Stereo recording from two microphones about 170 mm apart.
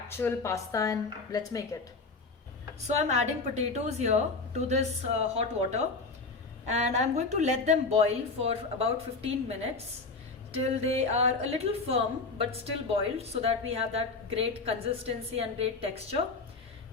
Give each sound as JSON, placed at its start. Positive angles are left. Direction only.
{"t": 0.1, "sound": "a woman's voice", "side_deg": 15}
{"t": 2.8, "sound": "a woman's voice", "side_deg": -40}
{"t": 6.7, "sound": "a woman's voice", "side_deg": -40}